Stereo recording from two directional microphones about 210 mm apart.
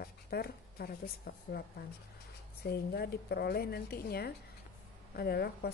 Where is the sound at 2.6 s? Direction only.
50° left (ahead or behind).